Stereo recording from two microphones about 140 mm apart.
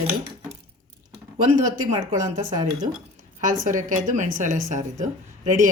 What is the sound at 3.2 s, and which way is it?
A woman's voice, 65° right (ahead or behind).